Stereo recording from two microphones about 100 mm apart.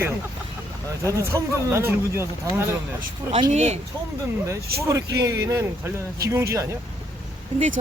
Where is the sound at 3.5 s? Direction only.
90° right.